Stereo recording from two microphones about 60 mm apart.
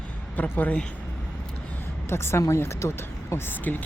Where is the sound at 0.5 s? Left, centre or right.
Left.